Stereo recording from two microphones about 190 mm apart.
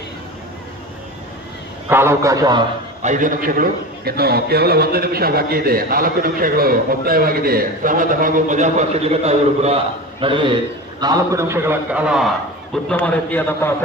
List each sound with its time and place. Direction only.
1.9 s a man's voice: 15° right (ahead or behind)
3.0 s a man's voice: 40° right (ahead or behind); by 12.3 s 5° right (ahead or behind)
12.7 s a man's voice: 5° left (ahead or behind)